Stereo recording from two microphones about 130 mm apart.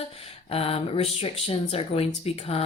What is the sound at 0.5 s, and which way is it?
Speech, 50° left (ahead or behind).